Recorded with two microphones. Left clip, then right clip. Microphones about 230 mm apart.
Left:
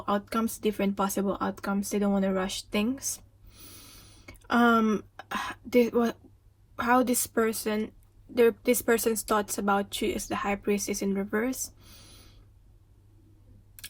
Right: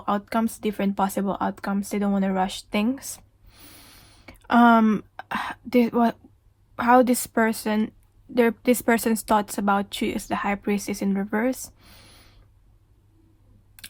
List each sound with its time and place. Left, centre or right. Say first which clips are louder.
0.1 s speech: right 4 dB; right